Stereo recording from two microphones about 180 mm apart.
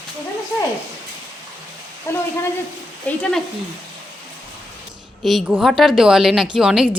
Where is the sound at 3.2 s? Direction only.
5° left (ahead or behind).